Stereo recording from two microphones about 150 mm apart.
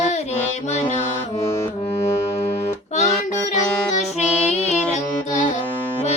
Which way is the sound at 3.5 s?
50° left (ahead or behind).